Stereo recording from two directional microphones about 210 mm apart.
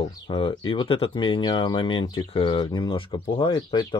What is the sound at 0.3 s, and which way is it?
Speech, 20° left (ahead or behind).